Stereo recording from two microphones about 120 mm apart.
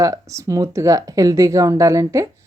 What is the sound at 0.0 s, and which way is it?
A woman's voice, 25° right (ahead or behind).